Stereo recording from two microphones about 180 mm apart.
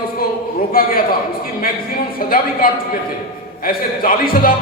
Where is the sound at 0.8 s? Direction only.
55° left (ahead or behind).